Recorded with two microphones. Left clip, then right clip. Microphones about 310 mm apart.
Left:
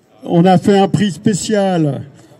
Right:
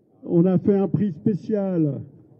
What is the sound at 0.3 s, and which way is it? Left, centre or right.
A man's voice, left.